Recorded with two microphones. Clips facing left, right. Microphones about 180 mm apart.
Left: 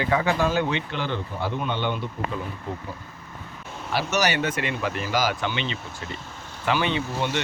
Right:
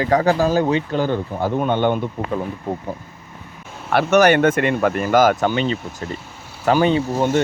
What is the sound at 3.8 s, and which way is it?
Speech, 55° right (ahead or behind).